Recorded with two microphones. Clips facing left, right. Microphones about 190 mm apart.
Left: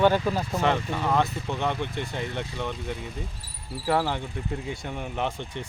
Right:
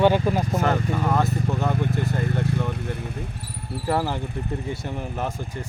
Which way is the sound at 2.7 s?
65° right (ahead or behind).